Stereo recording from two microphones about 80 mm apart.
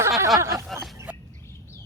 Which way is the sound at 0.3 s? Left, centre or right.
Right.